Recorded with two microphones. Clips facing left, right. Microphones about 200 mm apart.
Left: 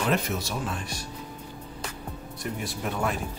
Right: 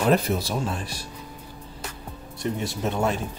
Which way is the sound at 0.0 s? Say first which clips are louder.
Right 5 dB; 35° right (ahead or behind).